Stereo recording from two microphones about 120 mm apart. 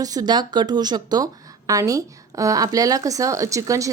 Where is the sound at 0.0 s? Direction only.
30° right (ahead or behind).